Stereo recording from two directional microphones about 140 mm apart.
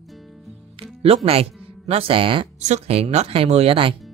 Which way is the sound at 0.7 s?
45° right (ahead or behind).